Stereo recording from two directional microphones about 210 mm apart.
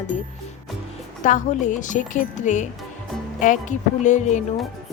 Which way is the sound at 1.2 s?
35° left (ahead or behind).